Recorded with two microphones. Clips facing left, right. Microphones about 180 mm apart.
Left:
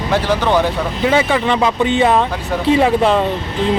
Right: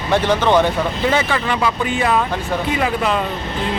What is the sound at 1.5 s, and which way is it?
Speech, 25° left (ahead or behind).